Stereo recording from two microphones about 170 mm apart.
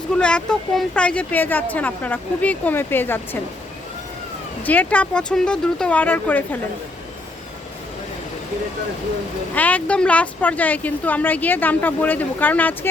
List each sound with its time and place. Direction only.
0.2 s speech: 5° left (ahead or behind)
4.6 s speech: 10° left (ahead or behind)
9.6 s speech: 10° left (ahead or behind)